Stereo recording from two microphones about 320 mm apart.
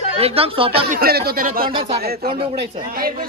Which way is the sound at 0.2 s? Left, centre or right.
Centre.